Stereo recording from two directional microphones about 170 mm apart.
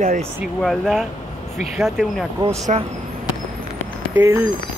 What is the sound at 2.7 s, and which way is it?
Speech, 40° right (ahead or behind).